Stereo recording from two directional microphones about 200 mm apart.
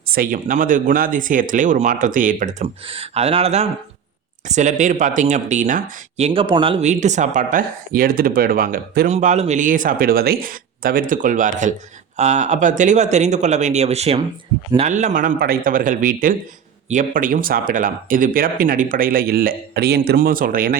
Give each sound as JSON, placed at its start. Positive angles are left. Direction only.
{"t": 0.0, "sound": "speech", "side_deg": -50}
{"t": 2.8, "sound": "speech", "side_deg": -30}
{"t": 9.1, "sound": "speech", "side_deg": -35}